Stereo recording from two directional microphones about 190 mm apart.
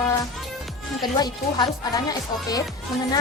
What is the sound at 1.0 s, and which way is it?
Speech, 20° left (ahead or behind).